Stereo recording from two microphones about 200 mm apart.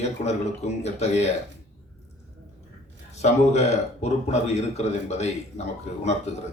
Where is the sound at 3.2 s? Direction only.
35° left (ahead or behind).